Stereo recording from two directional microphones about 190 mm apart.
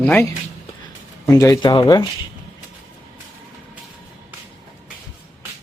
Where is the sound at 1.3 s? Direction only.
15° left (ahead or behind).